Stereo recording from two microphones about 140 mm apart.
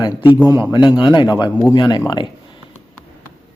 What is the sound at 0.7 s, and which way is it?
Speech, 30° left (ahead or behind).